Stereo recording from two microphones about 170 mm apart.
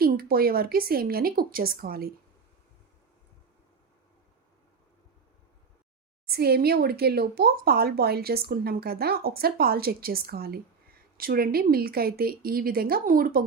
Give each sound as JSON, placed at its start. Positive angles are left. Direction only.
{"t": 0.0, "sound": "speech", "side_deg": -60}
{"t": 6.2, "sound": "speech", "side_deg": -65}